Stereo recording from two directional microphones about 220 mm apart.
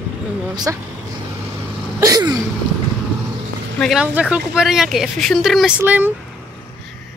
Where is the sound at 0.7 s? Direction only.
10° right (ahead or behind).